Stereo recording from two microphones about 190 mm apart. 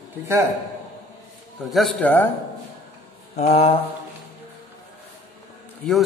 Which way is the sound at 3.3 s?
35° left (ahead or behind).